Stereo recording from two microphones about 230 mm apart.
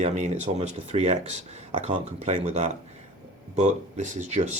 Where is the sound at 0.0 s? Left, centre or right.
Right.